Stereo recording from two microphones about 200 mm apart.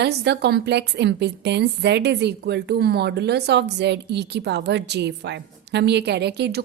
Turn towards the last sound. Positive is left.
turn(degrees=-55)  # may be behind; listen again after turning